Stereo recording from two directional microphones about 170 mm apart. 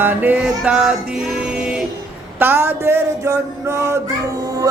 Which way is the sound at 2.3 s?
10° right (ahead or behind).